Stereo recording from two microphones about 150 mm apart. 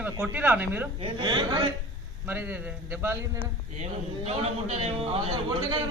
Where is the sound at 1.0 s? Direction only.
35° right (ahead or behind).